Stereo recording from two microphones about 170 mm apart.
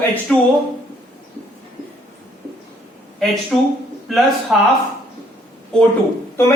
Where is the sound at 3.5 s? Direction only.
5° left (ahead or behind).